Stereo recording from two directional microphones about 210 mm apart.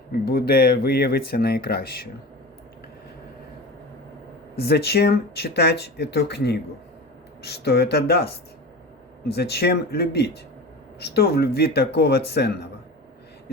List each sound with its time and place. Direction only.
0.3 s speech: 45° left (ahead or behind)
4.5 s speech: 50° left (ahead or behind)
9.3 s speech: 50° left (ahead or behind)